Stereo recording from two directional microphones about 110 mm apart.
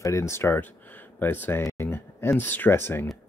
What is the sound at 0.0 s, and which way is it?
Speech, 25° left (ahead or behind).